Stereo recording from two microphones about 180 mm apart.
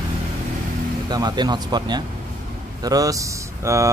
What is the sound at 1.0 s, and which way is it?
Speech, 25° right (ahead or behind).